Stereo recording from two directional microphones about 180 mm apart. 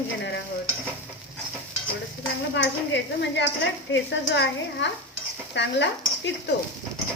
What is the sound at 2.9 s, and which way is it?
Speech, 75° left (ahead or behind).